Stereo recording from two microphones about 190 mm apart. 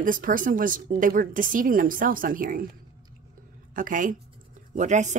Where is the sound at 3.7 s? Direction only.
45° right (ahead or behind).